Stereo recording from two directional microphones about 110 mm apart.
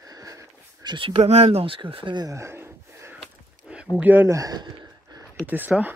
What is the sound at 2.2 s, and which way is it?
Gasp, 25° right (ahead or behind).